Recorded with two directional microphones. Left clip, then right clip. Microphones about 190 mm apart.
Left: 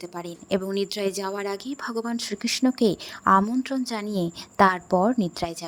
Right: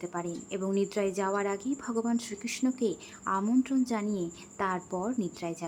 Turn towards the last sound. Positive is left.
turn(degrees=40)  # may be behind; listen again after turning